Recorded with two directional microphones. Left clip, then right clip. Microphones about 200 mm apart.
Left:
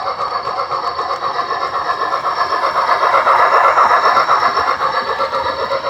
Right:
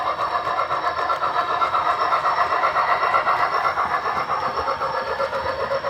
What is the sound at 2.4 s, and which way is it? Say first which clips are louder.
Vehicle: left 4 dB; 20° left (ahead or behind).